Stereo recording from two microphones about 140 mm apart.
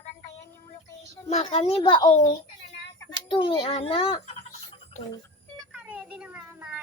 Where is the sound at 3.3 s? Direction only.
35° left (ahead or behind).